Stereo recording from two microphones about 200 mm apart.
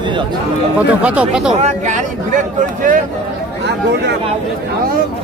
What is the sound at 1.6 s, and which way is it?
Speech, 35° right (ahead or behind).